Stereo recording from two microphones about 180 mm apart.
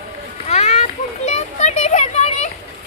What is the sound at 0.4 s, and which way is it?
Children playing, 40° left (ahead or behind).